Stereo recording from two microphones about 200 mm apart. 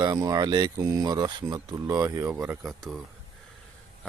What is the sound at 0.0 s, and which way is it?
Speech, 20° right (ahead or behind).